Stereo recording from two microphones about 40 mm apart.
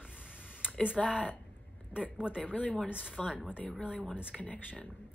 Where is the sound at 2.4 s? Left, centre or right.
Left.